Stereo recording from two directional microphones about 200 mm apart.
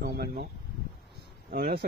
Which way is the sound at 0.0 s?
50° right (ahead or behind).